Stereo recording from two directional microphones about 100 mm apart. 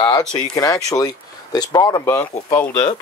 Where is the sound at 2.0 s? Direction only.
25° left (ahead or behind).